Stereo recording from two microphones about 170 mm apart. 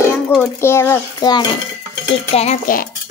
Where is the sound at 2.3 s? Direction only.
40° left (ahead or behind).